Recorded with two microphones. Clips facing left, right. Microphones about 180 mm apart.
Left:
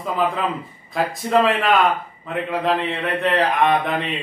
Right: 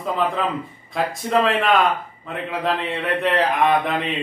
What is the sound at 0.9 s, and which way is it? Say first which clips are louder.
A man's voice: left 2 dB; centre (ahead or behind).